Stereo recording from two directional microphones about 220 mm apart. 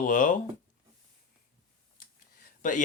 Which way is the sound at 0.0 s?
35° left (ahead or behind).